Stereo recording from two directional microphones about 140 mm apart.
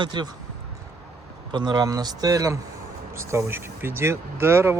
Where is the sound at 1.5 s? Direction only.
30° right (ahead or behind).